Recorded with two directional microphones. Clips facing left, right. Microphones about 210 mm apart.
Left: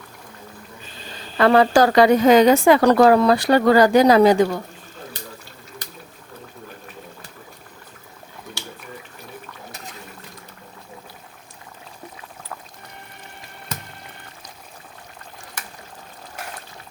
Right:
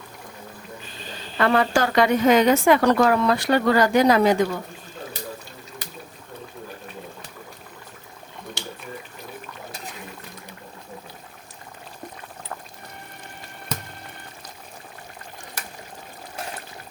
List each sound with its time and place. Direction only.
1.4 s a woman's voice: 35° left (ahead or behind)